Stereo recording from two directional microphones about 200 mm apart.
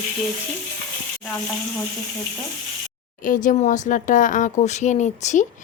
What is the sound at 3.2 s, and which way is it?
Speech, 40° left (ahead or behind).